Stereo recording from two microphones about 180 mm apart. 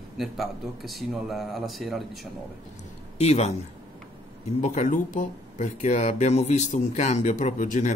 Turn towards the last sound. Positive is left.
turn(degrees=45)  # may be behind; listen again after turning